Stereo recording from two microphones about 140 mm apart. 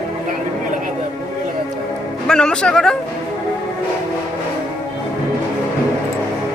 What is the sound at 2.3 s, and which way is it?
Speech, 5° left (ahead or behind).